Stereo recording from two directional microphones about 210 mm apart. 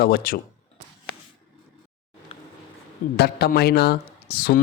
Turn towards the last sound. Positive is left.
turn(degrees=50)  # may be behind; listen again after turning